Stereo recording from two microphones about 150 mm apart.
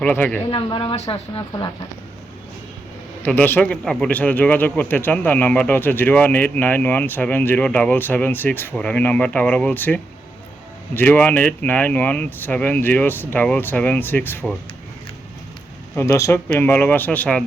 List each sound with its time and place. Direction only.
0.0 s a man's voice: 10° left (ahead or behind)
0.5 s speech: 35° left (ahead or behind)
3.2 s a man's voice: 10° left (ahead or behind)
16.0 s a man's voice: 20° left (ahead or behind)